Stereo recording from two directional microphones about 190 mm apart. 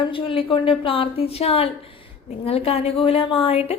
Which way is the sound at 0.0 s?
30° left (ahead or behind).